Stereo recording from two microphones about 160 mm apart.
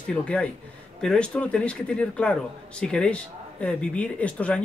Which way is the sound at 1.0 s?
5° left (ahead or behind).